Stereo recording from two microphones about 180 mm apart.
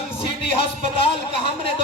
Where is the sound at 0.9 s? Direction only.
30° left (ahead or behind).